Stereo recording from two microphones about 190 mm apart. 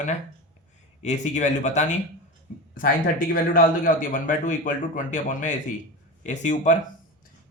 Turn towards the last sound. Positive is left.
turn(degrees=40)  # may be behind; listen again after turning